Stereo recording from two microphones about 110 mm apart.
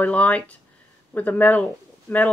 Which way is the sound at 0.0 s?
15° left (ahead or behind).